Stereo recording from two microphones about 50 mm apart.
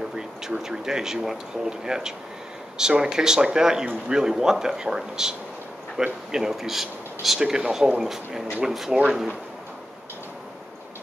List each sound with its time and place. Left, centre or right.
0.1 s speech: centre
8.9 s speech: centre